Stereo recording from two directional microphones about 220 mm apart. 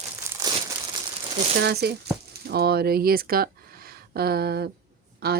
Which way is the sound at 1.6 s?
50° right (ahead or behind).